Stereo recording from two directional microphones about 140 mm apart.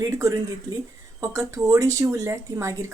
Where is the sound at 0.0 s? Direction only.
25° right (ahead or behind).